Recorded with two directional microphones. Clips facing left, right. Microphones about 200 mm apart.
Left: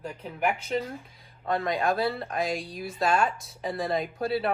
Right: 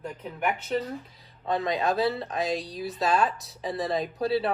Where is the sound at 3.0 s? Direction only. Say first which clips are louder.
Even; centre (ahead or behind).